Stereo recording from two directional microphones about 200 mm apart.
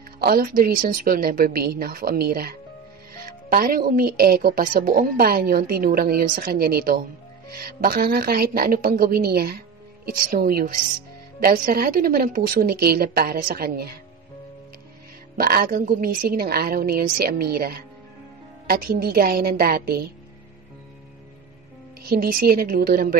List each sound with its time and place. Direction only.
0.2 s a woman's voice: 45° right (ahead or behind)
15.3 s a woman's voice: 45° right (ahead or behind)
22.1 s a woman's voice: 45° right (ahead or behind)